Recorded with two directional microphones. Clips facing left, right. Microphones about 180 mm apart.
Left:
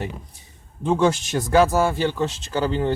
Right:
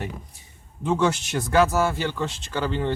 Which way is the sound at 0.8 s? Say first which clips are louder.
Left 3 dB; 30° left (ahead or behind).